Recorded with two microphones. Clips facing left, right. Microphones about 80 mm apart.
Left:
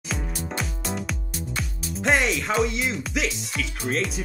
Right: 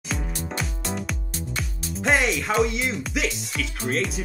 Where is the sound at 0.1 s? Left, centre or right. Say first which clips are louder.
Even; centre.